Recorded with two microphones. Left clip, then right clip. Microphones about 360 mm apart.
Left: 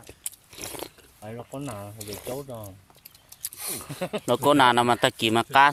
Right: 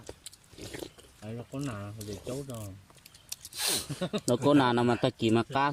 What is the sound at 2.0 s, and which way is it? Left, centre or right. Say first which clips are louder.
Speech: left 5 dB; left.